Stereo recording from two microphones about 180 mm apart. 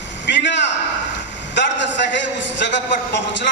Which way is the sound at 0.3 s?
75° left (ahead or behind).